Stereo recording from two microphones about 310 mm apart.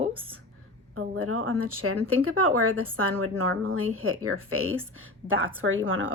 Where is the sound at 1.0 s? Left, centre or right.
Right.